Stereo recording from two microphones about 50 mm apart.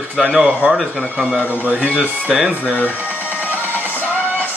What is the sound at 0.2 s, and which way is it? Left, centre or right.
Speech, centre.